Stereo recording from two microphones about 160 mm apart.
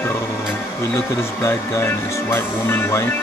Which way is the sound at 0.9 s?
15° left (ahead or behind).